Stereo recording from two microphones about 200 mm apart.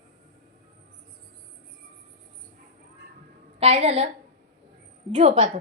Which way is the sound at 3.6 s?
30° right (ahead or behind).